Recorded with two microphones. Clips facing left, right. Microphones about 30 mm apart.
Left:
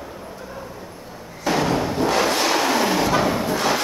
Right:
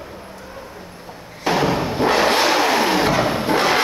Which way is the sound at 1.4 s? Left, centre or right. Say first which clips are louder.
Right 2 dB; right.